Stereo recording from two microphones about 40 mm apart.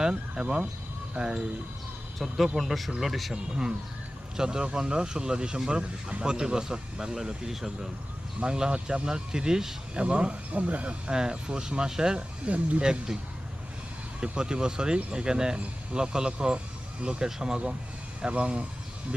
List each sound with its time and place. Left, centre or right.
0.1 s speech: right
2.1 s speech: centre
4.4 s speech: centre
10.0 s speech: right
11.1 s speech: centre
12.5 s speech: right
14.2 s speech: right